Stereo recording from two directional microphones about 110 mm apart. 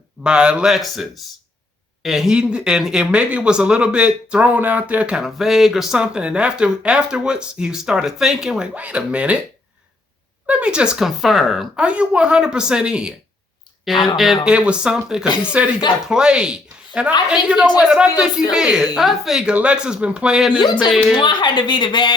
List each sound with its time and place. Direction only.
0.2 s speech: 10° right (ahead or behind)
10.4 s a woman's voice: 10° right (ahead or behind)
14.4 s a woman's voice: 10° right (ahead or behind)
21.2 s a woman's voice: 45° left (ahead or behind)